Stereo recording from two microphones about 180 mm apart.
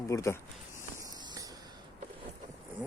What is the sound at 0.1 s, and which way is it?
Speech, 15° left (ahead or behind).